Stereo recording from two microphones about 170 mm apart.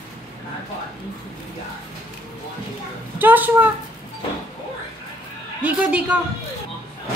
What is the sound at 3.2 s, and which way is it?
Speech, 10° right (ahead or behind).